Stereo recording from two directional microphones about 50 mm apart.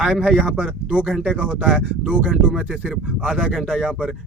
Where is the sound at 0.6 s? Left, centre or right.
Right.